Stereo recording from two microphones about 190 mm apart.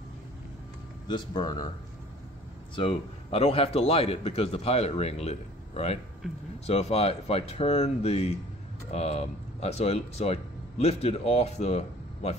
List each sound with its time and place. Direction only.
1.0 s speech: 25° left (ahead or behind)
2.7 s a man's voice: 30° left (ahead or behind)
6.2 s speech: 5° right (ahead or behind)
6.6 s a man's voice: 35° left (ahead or behind)